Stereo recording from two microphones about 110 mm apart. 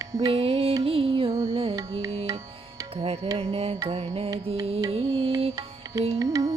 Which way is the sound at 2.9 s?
60° right (ahead or behind).